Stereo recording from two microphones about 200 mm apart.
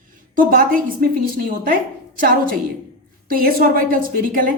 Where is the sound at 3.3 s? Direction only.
45° right (ahead or behind).